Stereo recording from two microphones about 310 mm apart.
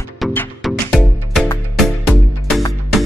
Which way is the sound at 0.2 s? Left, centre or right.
Centre.